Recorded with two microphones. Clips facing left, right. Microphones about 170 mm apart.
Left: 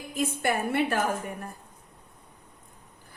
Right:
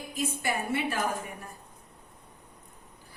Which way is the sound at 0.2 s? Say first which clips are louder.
Left 4 dB; 55° left (ahead or behind).